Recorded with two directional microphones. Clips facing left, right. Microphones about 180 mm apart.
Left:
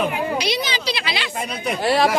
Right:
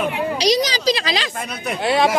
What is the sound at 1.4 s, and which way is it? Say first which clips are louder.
Speech: left 1 dB; 5° left (ahead or behind).